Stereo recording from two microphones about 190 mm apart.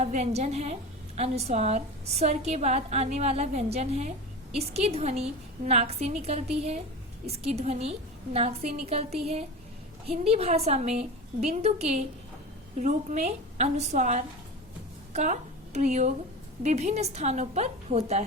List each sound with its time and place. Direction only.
0.0 s a woman's voice: 35° right (ahead or behind)